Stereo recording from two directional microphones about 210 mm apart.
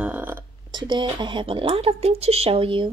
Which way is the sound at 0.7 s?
20° right (ahead or behind).